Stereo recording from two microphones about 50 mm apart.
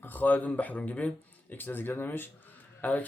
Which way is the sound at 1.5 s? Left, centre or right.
Left.